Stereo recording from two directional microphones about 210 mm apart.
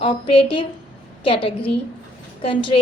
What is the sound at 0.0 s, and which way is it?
A woman's voice, 25° left (ahead or behind).